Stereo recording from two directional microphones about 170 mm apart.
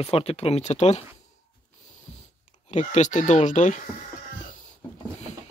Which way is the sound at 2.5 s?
45° left (ahead or behind).